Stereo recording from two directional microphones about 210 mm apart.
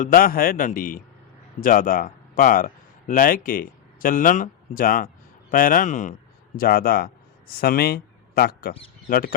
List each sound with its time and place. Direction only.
0.0 s a man's voice: 45° left (ahead or behind)